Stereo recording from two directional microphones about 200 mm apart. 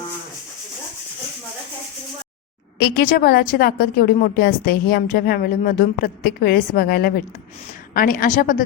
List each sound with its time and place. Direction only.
2.7 s a woman's voice: 50° left (ahead or behind)